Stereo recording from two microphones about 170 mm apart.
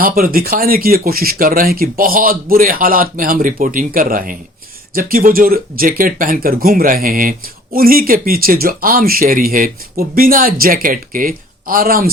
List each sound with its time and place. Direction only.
0.0 s speech: 60° right (ahead or behind)